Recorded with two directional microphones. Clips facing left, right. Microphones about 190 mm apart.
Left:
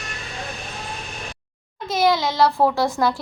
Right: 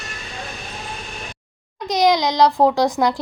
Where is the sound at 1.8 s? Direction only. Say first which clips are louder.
Right 3 dB; 15° right (ahead or behind).